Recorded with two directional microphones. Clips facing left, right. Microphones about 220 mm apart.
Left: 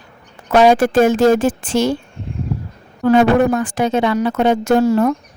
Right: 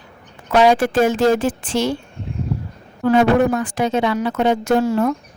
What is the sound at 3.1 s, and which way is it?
Speech, 45° left (ahead or behind).